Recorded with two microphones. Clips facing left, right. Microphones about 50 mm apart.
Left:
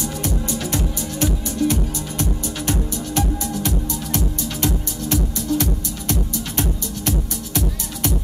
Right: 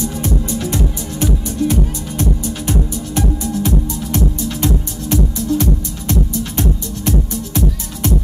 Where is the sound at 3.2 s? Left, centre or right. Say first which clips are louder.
Right 4 dB; right.